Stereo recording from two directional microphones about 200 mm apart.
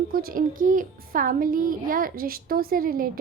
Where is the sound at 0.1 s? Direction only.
45° right (ahead or behind).